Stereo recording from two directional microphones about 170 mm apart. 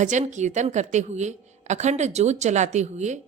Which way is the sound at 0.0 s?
45° right (ahead or behind).